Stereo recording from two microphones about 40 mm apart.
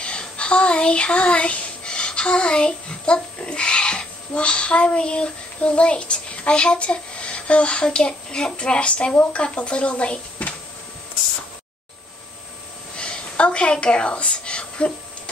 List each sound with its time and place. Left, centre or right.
0.0 s child singing: left
9.3 s speech: left
12.9 s a sound: left